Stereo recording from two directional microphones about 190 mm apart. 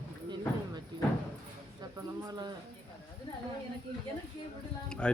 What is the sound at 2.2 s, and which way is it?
Speech, 20° right (ahead or behind).